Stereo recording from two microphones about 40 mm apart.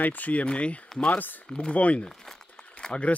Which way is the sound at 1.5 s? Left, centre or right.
Left.